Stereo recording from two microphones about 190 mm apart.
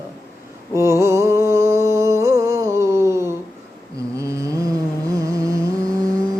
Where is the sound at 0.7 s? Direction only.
15° right (ahead or behind).